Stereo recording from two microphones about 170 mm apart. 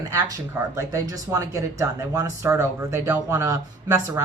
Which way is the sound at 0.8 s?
20° right (ahead or behind).